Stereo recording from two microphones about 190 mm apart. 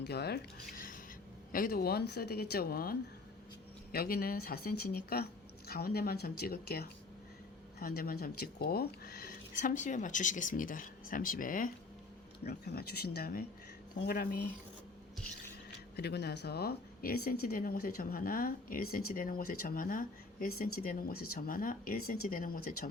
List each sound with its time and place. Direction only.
0.0 s speech: 60° left (ahead or behind)
16.0 s speech: 60° left (ahead or behind)